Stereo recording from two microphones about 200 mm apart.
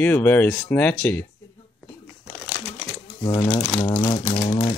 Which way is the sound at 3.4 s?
5° left (ahead or behind).